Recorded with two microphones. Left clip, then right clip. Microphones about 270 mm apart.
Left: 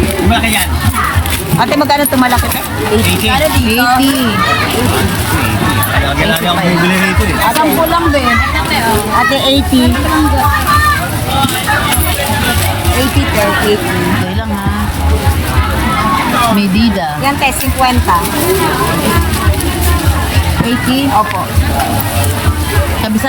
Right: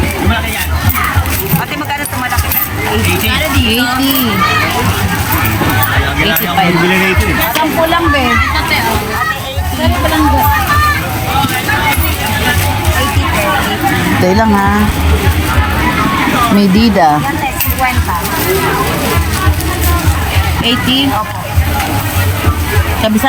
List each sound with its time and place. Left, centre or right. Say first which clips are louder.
16.6 s speech: right 4 dB; right